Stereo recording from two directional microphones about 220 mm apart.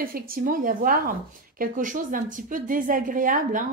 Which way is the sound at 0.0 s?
40° right (ahead or behind).